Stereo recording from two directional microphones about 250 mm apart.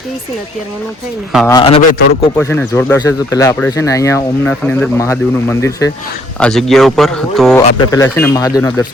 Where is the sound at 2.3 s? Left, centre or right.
Centre.